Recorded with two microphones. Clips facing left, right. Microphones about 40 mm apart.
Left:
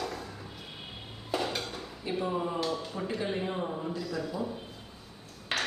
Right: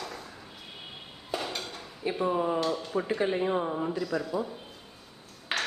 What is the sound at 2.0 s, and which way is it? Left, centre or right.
Speech, centre.